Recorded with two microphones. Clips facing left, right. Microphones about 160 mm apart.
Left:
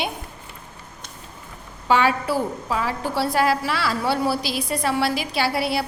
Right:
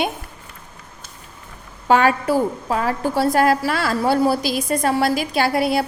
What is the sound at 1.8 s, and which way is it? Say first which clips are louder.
A woman's voice: right 3 dB; 45° right (ahead or behind).